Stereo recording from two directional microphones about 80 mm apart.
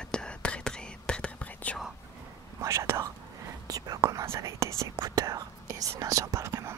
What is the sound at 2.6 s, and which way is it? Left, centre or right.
Whispering, right.